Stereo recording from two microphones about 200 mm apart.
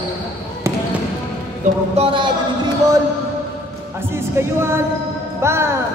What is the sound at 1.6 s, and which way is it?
Speech, 40° right (ahead or behind).